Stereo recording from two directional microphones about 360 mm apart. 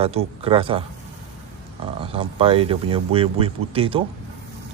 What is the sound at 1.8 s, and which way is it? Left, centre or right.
Speech, centre.